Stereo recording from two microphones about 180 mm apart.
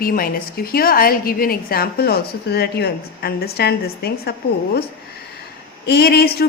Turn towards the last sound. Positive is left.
turn(degrees=60)  # may be behind; listen again after turning